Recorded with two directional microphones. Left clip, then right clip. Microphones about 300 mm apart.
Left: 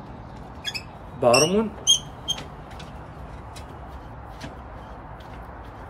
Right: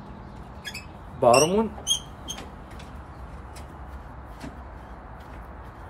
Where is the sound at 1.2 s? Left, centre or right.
Centre.